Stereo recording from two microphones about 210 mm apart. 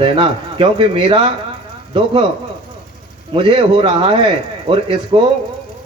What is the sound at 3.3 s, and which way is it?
Speech, 25° right (ahead or behind).